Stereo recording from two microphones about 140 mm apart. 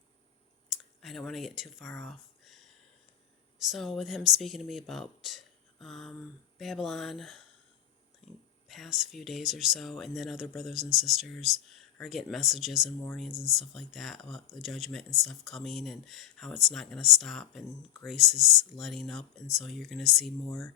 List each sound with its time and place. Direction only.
0.7 s speech: centre (ahead or behind)
3.6 s speech: centre (ahead or behind)
8.2 s a sound: centre (ahead or behind)
8.6 s speech: centre (ahead or behind)